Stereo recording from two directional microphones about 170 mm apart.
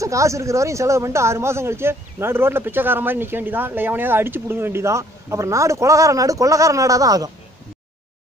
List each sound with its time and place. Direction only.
0.0 s speech: 20° right (ahead or behind)